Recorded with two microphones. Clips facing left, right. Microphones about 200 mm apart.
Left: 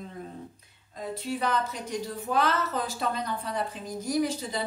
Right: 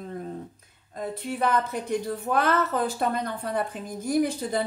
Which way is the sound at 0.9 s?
55° right (ahead or behind).